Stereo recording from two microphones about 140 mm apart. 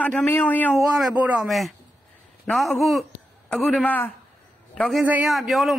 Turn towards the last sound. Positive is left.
turn(degrees=0)  # may be behind; listen again after turning